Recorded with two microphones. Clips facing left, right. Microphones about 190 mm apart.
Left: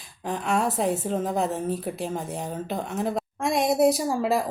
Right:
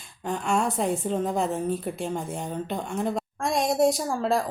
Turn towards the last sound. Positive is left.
turn(degrees=5)  # may be behind; listen again after turning